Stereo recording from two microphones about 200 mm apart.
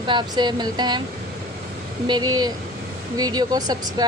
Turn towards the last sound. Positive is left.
turn(degrees=-20)  # may be behind; listen again after turning